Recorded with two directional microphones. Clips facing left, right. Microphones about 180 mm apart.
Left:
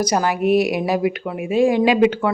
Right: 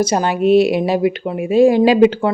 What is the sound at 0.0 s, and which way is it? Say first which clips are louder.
Speech: right 3 dB; 25° right (ahead or behind).